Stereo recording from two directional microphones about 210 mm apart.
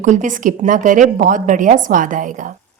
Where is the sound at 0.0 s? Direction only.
35° right (ahead or behind).